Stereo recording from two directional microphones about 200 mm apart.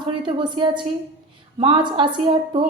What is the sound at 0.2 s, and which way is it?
A woman's voice, 25° right (ahead or behind).